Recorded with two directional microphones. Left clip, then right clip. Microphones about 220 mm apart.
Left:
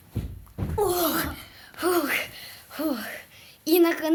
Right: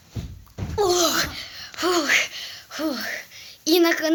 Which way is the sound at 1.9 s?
15° right (ahead or behind).